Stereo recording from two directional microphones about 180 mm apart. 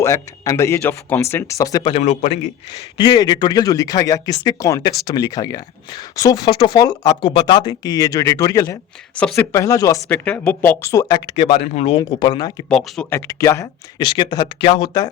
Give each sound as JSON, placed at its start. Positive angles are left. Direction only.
{"t": 0.0, "sound": "speech", "side_deg": 15}
{"t": 2.0, "sound": "speech", "side_deg": 40}
{"t": 3.0, "sound": "speech", "side_deg": 25}
{"t": 11.3, "sound": "speech", "side_deg": 35}
{"t": 12.0, "sound": "speech", "side_deg": 25}
{"t": 12.6, "sound": "speech", "side_deg": 5}